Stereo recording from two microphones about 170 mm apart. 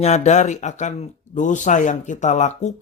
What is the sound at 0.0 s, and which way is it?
Speech, 40° left (ahead or behind).